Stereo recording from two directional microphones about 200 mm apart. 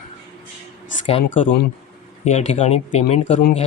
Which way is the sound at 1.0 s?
30° left (ahead or behind).